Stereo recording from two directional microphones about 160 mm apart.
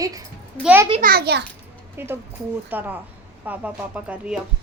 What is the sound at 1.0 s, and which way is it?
Speech, 80° right.